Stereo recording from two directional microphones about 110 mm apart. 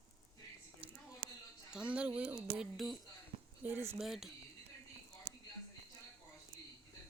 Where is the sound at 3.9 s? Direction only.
5° right (ahead or behind).